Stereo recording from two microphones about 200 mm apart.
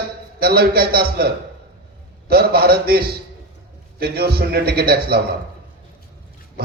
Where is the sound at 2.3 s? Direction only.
50° right (ahead or behind).